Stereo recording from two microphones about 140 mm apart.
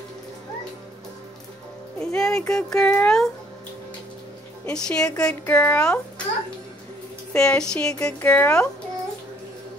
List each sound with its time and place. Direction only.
2.0 s a child's voice: 5° left (ahead or behind)
4.6 s speech: 5° left (ahead or behind)
7.3 s speech: 5° left (ahead or behind)